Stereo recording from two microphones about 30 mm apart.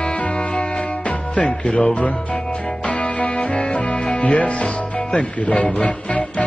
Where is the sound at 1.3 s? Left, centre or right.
Left.